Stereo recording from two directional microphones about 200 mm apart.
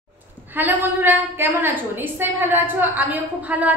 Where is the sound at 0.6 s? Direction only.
10° right (ahead or behind).